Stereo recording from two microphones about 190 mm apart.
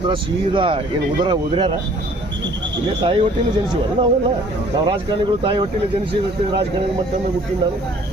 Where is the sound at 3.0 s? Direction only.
25° right (ahead or behind).